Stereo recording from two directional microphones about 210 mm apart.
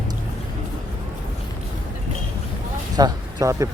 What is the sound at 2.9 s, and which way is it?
Speech, 15° right (ahead or behind).